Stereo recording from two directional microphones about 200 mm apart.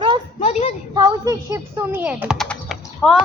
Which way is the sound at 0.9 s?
20° right (ahead or behind).